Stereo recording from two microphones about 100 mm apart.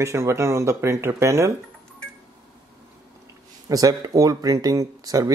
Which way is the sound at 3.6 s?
35° right (ahead or behind).